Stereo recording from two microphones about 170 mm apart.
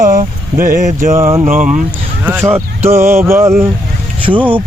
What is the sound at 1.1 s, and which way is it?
Speech, 15° right (ahead or behind).